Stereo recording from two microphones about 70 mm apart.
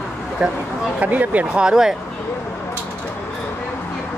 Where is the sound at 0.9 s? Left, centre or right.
Right.